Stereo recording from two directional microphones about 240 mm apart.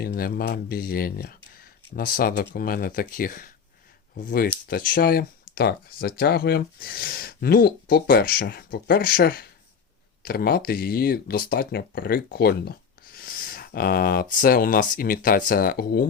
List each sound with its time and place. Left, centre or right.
0.0 s speech: left